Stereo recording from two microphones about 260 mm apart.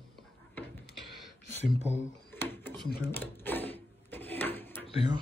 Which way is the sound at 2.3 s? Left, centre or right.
Centre.